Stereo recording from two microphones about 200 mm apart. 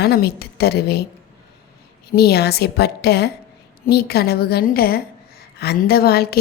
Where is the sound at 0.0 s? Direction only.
55° left (ahead or behind).